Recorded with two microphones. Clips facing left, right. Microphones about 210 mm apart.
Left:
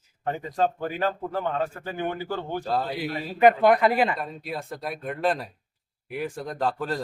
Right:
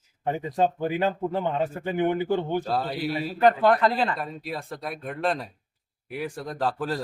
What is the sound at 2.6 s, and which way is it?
Speech, centre (ahead or behind).